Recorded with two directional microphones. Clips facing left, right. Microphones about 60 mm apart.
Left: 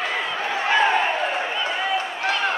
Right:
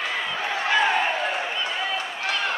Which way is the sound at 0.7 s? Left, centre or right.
Left.